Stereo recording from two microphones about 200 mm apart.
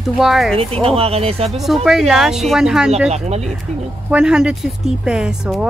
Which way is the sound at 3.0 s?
35° right (ahead or behind).